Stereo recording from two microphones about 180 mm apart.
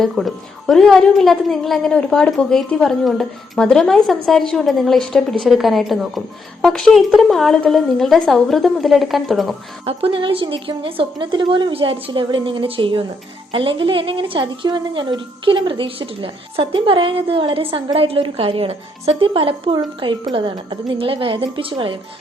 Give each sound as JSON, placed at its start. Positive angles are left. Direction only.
{"t": 0.0, "sound": "a woman's voice", "side_deg": 0}
{"t": 9.8, "sound": "a woman's voice", "side_deg": -30}